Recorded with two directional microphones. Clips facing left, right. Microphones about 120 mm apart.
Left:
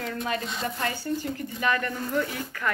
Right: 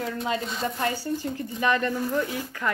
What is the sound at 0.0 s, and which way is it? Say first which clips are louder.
Speech: right 2 dB; 15° right (ahead or behind).